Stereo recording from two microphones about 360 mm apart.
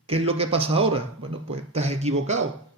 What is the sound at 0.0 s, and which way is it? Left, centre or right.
A man's voice, centre.